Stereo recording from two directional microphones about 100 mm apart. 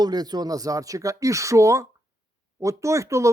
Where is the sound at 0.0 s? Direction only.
40° right (ahead or behind).